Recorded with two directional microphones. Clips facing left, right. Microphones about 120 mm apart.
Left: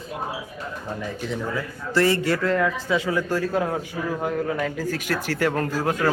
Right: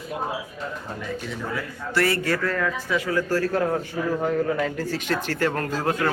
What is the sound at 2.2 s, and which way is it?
A man's voice, 25° left (ahead or behind).